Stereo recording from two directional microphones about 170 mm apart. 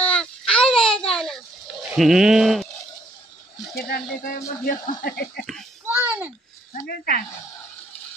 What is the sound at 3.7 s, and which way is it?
Speech, 60° left (ahead or behind).